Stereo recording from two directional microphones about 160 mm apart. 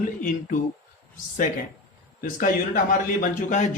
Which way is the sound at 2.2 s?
55° left (ahead or behind).